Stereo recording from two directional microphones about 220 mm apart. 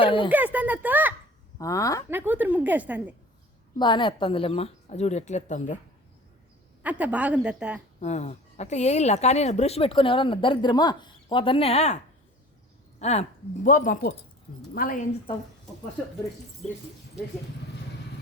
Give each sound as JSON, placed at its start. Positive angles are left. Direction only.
{"t": 0.0, "sound": "a sound", "side_deg": 25}
{"t": 0.3, "sound": "speech", "side_deg": -10}
{"t": 1.5, "sound": "a woman's voice", "side_deg": 15}
{"t": 2.0, "sound": "a woman's voice", "side_deg": -10}
{"t": 3.8, "sound": "speech", "side_deg": 20}
{"t": 6.8, "sound": "a woman's voice", "side_deg": -5}
{"t": 8.0, "sound": "speech", "side_deg": 30}
{"t": 13.0, "sound": "speech", "side_deg": 30}